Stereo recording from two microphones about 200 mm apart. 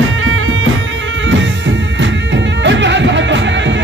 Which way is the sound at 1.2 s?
65° right (ahead or behind).